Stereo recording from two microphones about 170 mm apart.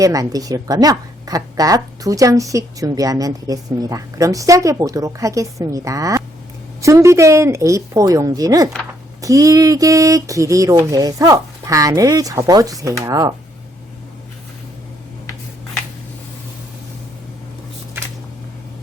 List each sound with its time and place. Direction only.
0.0 s a woman's voice: 20° right (ahead or behind)